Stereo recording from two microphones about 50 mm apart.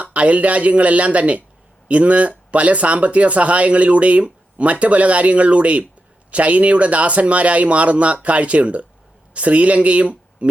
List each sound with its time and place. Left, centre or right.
0.0 s speech: right